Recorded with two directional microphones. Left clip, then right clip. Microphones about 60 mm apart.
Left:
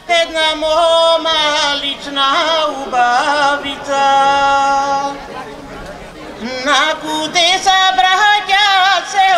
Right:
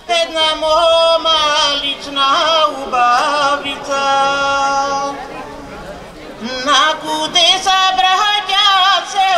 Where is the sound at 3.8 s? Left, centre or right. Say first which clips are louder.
Left 3 dB; right.